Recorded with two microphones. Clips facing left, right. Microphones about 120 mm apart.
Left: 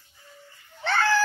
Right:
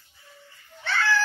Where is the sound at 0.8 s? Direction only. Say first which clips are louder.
Left 2 dB; 45° left (ahead or behind).